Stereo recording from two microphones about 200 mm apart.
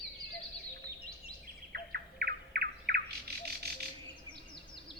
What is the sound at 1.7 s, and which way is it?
Bird, 50° right (ahead or behind).